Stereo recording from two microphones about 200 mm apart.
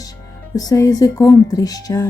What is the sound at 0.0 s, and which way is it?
Music, 20° left (ahead or behind).